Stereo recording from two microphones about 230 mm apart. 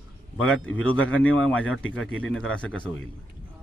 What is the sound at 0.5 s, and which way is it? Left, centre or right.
Speech, centre.